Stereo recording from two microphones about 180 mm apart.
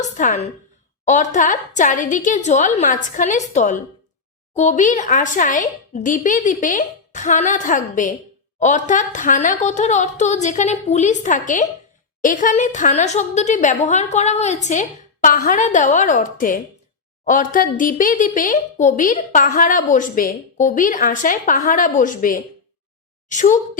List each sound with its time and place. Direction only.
0.0 s a woman's voice: 45° left (ahead or behind)